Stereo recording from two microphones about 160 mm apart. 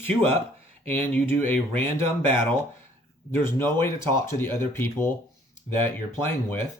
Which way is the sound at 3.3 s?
15° left (ahead or behind).